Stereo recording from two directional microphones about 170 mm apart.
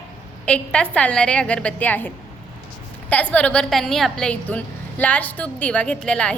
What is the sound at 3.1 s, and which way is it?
A woman's voice, 10° left (ahead or behind).